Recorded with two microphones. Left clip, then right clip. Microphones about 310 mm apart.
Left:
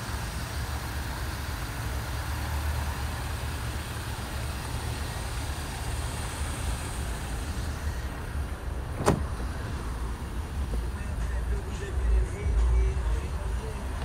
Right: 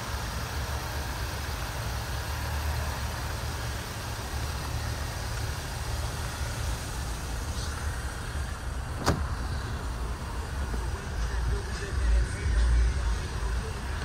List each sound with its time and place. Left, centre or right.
9.1 s vehicle: left